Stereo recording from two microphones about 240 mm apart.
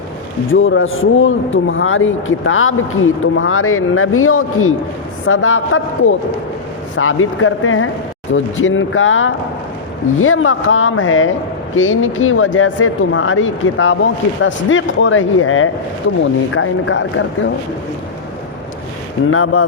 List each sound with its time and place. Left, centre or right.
0.5 s a man's voice: left
19.3 s speech: left